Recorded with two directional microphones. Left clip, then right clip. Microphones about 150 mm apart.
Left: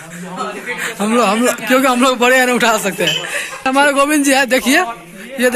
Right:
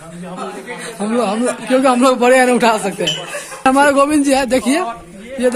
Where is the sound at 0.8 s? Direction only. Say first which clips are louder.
Left 4 dB; 5° left (ahead or behind).